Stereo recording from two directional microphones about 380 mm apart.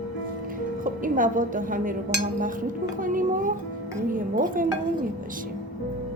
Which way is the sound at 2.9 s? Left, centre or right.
Right.